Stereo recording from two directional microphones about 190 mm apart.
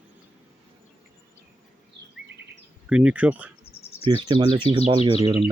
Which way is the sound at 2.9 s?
5° right (ahead or behind).